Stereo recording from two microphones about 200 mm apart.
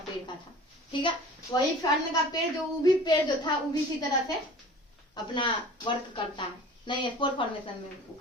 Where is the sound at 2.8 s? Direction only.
20° left (ahead or behind).